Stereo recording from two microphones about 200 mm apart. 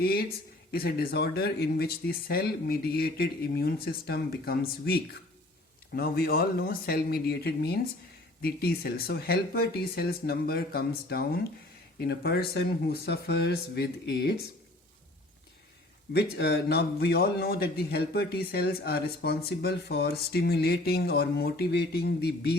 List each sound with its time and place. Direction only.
0.0 s a man's voice: 50° left (ahead or behind)
16.1 s a man's voice: 55° left (ahead or behind)